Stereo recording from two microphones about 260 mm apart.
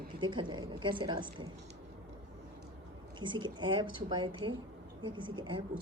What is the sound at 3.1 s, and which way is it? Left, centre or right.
A woman's voice, centre.